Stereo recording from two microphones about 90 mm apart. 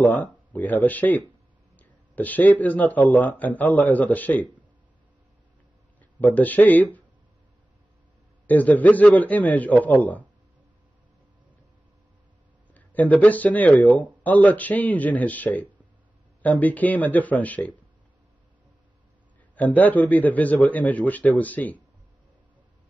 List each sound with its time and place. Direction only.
0.0 s speech: 20° left (ahead or behind)
6.1 s speech: 20° left (ahead or behind)
8.5 s speech: 20° left (ahead or behind)
12.7 s speech: 15° left (ahead or behind)
19.5 s speech: 20° left (ahead or behind)